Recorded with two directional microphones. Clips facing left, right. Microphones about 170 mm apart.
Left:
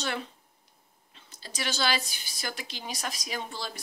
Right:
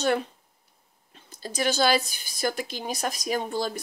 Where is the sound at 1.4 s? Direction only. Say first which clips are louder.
Right 8 dB; 45° right (ahead or behind).